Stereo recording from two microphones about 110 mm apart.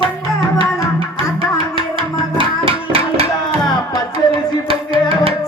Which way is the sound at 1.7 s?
50° right (ahead or behind).